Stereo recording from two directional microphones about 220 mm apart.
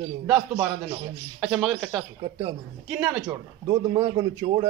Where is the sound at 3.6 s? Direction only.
20° right (ahead or behind).